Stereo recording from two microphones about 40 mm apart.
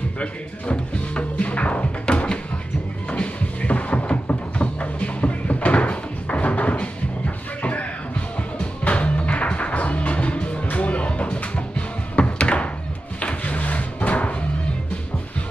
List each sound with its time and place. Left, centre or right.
0.2 s speech: left
3.1 s music: left
8.8 s music: left
13.2 s drawer open or close: left